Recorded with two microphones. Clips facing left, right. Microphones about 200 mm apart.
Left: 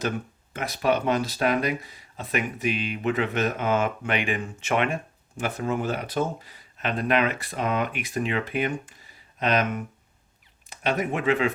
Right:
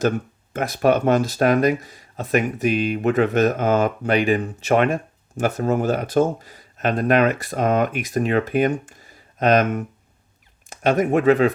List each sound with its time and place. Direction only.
0.5 s speech: 45° right (ahead or behind)